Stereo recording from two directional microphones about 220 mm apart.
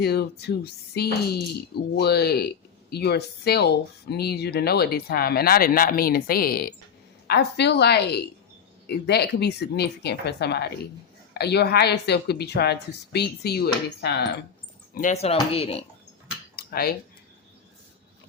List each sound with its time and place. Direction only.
0.0 s speech: 45° left (ahead or behind)
14.9 s speech: 35° left (ahead or behind)
16.6 s cutlery: 45° left (ahead or behind)